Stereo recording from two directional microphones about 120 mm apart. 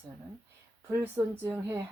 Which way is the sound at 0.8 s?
20° right (ahead or behind).